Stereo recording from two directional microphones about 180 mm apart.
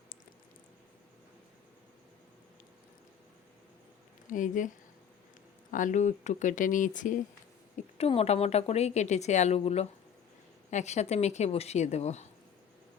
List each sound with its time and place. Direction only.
4.3 s speech: 45° left (ahead or behind)
5.7 s speech: 45° left (ahead or behind)
7.9 s speech: 35° left (ahead or behind)